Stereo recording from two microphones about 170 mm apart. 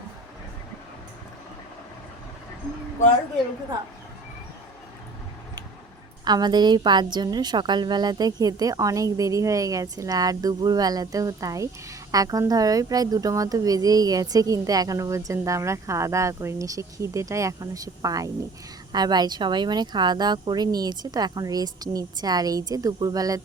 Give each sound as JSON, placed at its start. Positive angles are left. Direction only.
{"t": 6.2, "sound": "a woman's voice", "side_deg": -25}